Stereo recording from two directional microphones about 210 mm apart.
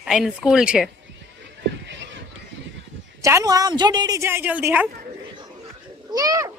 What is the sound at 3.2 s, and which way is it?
A woman's voice, 15° right (ahead or behind).